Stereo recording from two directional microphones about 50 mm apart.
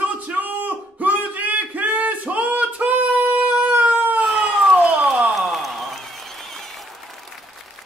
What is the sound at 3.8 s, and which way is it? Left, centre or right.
Cat, right.